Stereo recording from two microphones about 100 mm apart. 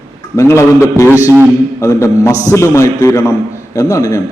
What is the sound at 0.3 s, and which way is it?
Speech, 30° left (ahead or behind).